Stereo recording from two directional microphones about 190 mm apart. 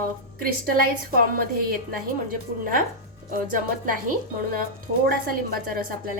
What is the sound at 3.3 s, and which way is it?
Speech, 45° right (ahead or behind).